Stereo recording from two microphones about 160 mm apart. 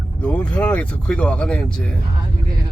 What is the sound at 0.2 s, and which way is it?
Speech, 10° left (ahead or behind).